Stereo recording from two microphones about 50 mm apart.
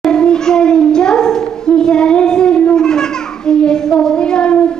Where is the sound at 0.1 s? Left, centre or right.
Centre.